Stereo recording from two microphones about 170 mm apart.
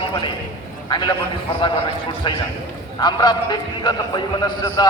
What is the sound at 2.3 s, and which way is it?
A man's voice, 25° left (ahead or behind).